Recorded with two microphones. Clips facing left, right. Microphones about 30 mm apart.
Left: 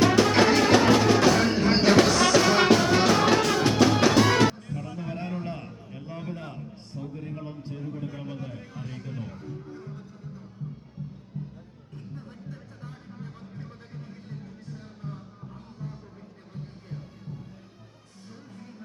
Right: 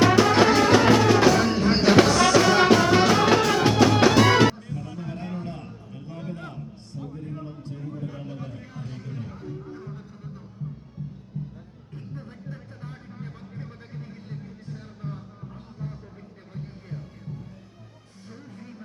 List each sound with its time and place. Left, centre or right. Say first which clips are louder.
0.0 s music: right 2 dB; centre
4.5 s music: even; centre
5.0 s a sound: left 2 dB; centre
7.8 s a sound: right 1 dB; centre
9.4 s music: right 3 dB; centre
11.3 s music: right 2 dB; centre
12.5 s music: right 3 dB; right
15.8 s music: right 3 dB; right